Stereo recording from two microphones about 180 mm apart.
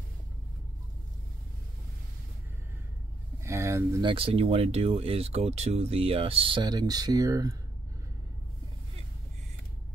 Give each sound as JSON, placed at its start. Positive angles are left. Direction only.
{"t": 3.4, "sound": "speech", "side_deg": -15}
{"t": 4.1, "sound": "speech", "side_deg": -35}